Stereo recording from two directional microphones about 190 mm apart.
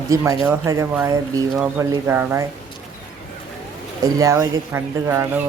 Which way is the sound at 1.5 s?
5° right (ahead or behind).